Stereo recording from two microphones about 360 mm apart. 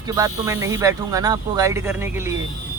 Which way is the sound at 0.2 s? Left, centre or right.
Centre.